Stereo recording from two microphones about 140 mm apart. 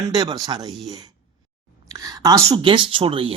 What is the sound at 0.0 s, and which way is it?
Speech, 25° right (ahead or behind).